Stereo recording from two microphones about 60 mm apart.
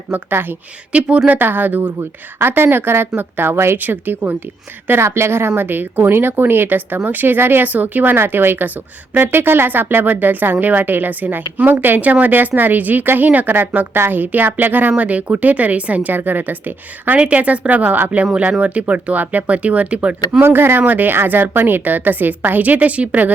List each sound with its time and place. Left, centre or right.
0.1 s speech: right
1.0 s a woman's voice: centre
1.3 s speech: right
3.8 s speech: right
4.9 s a woman's voice: right
20.4 s speech: right